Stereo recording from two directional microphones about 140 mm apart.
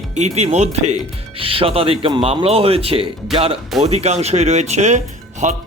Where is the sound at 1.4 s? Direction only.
40° right (ahead or behind).